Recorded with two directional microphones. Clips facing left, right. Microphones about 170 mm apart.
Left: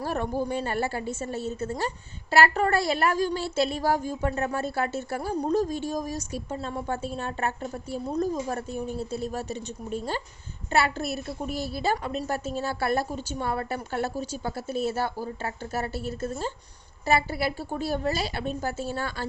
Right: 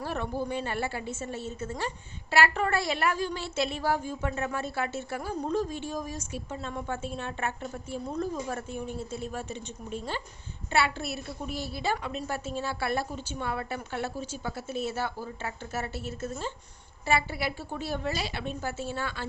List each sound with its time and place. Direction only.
0.0 s a woman's voice: 45° left (ahead or behind)